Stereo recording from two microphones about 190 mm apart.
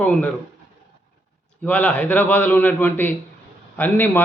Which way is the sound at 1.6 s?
5° left (ahead or behind).